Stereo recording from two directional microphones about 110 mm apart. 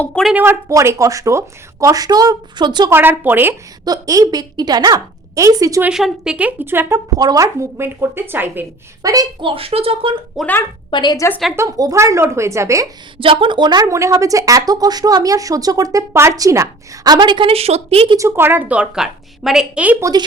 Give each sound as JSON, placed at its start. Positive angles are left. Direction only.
{"t": 0.3, "sound": "speech", "side_deg": -25}
{"t": 2.9, "sound": "speech", "side_deg": -20}
{"t": 3.8, "sound": "speech", "side_deg": -35}
{"t": 5.9, "sound": "a woman's voice", "side_deg": -5}
{"t": 7.2, "sound": "speech", "side_deg": -35}
{"t": 9.0, "sound": "speech", "side_deg": -30}
{"t": 9.4, "sound": "speech", "side_deg": -55}
{"t": 10.4, "sound": "speech", "side_deg": -5}
{"t": 10.9, "sound": "a woman's voice", "side_deg": 40}
{"t": 11.5, "sound": "speech", "side_deg": -30}
{"t": 13.1, "sound": "a woman's voice", "side_deg": -50}
{"t": 13.8, "sound": "speech", "side_deg": -30}
{"t": 18.2, "sound": "a woman's voice", "side_deg": -20}
{"t": 20.0, "sound": "speech", "side_deg": -35}